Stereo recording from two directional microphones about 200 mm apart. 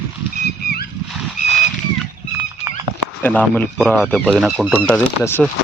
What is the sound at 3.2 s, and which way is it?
Speech, 10° left (ahead or behind).